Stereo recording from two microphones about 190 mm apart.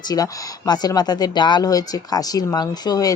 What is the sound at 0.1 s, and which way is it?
Speech, 20° left (ahead or behind).